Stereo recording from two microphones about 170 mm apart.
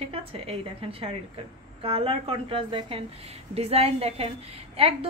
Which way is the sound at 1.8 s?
35° right (ahead or behind).